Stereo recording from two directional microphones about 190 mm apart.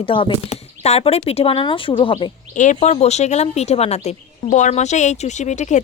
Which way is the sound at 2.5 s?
40° left (ahead or behind).